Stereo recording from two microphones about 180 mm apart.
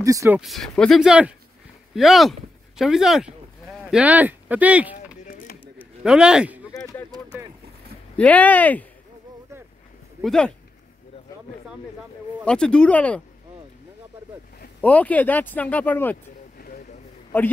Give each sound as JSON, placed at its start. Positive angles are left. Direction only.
{"t": 0.0, "sound": "speech", "side_deg": -15}
{"t": 0.4, "sound": "speech", "side_deg": 0}
{"t": 5.2, "sound": "a sound", "side_deg": 50}
{"t": 6.0, "sound": "speech", "side_deg": -5}
{"t": 6.7, "sound": "a sound", "side_deg": 20}
{"t": 8.2, "sound": "speech", "side_deg": 10}
{"t": 10.2, "sound": "speech", "side_deg": 5}
{"t": 12.4, "sound": "speech", "side_deg": 5}
{"t": 14.8, "sound": "speech", "side_deg": 10}
{"t": 16.5, "sound": "a sound", "side_deg": 55}
{"t": 17.3, "sound": "speech", "side_deg": 10}